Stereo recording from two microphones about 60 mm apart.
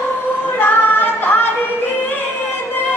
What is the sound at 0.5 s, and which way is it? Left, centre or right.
Singing, left.